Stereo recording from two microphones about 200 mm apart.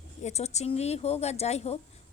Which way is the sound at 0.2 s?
35° left (ahead or behind).